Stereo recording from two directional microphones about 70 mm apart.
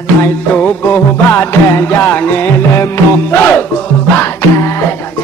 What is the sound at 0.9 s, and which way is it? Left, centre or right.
Music, left.